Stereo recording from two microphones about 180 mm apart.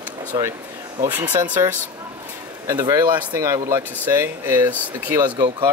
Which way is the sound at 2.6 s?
20° right (ahead or behind).